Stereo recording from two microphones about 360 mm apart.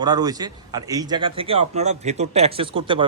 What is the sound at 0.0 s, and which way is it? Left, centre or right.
Speech, centre.